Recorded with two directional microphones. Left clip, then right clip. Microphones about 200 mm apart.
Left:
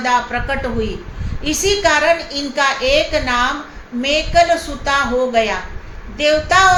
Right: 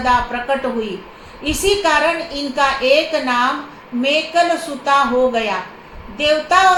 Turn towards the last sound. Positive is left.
turn(degrees=20)  # may be behind; listen again after turning